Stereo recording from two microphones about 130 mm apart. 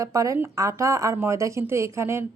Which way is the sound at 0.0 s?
25° right (ahead or behind).